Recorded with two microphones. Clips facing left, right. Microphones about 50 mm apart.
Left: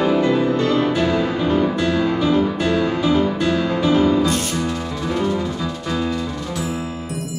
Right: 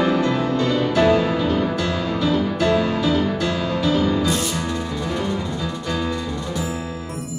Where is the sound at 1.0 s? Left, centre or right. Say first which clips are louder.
Right 2 dB; centre.